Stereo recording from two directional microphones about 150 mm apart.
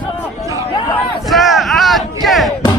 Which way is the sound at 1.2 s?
Centre (ahead or behind).